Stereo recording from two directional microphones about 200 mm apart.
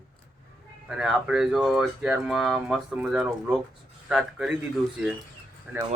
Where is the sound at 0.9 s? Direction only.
5° right (ahead or behind).